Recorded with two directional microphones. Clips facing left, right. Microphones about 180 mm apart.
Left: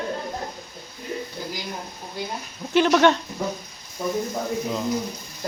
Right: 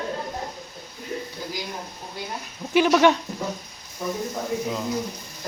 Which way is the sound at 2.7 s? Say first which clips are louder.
Even; 10° right (ahead or behind).